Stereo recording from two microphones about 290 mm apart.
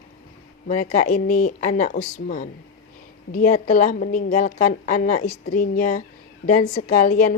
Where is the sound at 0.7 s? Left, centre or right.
Left.